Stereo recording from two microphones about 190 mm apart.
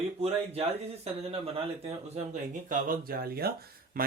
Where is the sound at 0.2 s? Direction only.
30° right (ahead or behind).